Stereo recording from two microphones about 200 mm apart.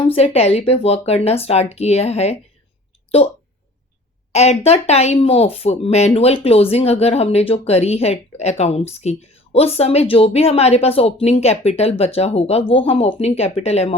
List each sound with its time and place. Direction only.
0.1 s speech: 30° left (ahead or behind)
4.3 s speech: 30° left (ahead or behind)